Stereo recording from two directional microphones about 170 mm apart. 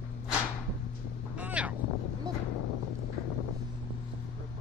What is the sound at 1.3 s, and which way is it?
Vehicle, 5° right (ahead or behind).